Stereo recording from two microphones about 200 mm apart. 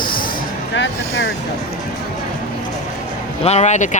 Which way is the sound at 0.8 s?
55° left (ahead or behind).